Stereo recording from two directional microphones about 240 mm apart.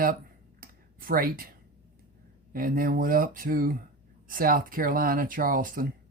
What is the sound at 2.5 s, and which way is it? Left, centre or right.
Speech, right.